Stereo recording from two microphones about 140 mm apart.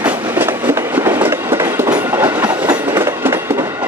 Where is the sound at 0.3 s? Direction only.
15° right (ahead or behind).